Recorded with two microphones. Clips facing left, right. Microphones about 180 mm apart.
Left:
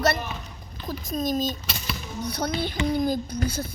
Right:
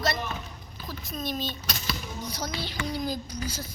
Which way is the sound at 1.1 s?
45° left (ahead or behind).